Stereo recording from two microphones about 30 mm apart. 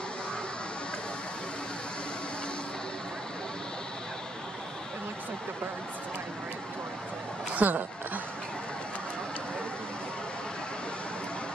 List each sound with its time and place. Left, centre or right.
7.5 s speech: right